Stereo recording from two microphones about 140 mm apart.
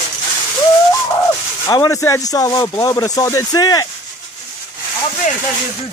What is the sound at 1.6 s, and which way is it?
Speech, 25° left (ahead or behind).